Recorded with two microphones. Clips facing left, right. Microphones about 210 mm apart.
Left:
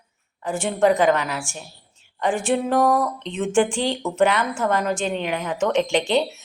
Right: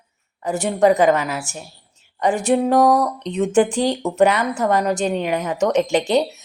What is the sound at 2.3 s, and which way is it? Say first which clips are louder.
Speech: right 4 dB; 40° right (ahead or behind).